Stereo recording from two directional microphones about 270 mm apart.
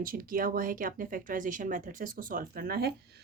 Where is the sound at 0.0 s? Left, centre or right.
Right.